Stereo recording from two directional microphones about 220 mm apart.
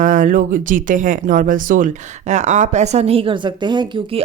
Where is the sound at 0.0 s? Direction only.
35° right (ahead or behind).